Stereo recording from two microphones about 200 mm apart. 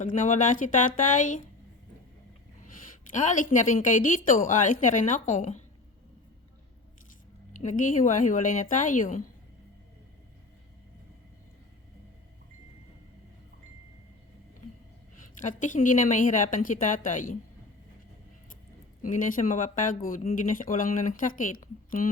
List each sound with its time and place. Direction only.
0.0 s speech: 40° left (ahead or behind)
3.1 s speech: 40° left (ahead or behind)
7.5 s speech: 40° left (ahead or behind)
15.4 s speech: 40° left (ahead or behind)
19.0 s speech: 40° left (ahead or behind)